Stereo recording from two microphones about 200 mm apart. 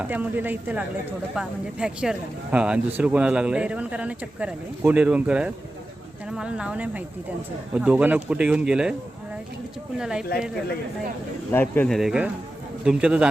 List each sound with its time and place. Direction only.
0.0 s speech: 10° right (ahead or behind)
10.0 s speech: 5° right (ahead or behind)
11.5 s speech: 10° left (ahead or behind)